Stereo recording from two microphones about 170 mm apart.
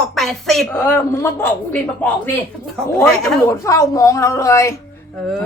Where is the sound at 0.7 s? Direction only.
10° left (ahead or behind).